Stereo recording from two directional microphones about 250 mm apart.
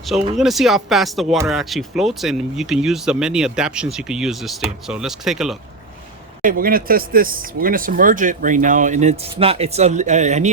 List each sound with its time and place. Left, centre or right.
0.1 s speech: centre
6.4 s speech: right